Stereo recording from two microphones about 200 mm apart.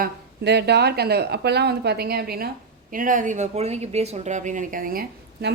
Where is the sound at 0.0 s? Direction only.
55° right (ahead or behind).